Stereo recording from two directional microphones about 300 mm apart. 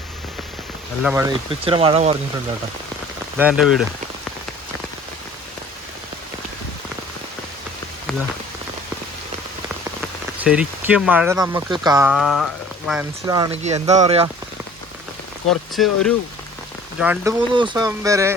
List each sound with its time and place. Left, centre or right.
1.0 s speech: centre
3.3 s speech: centre
10.4 s speech: centre; by 14.3 s right
15.7 s speech: centre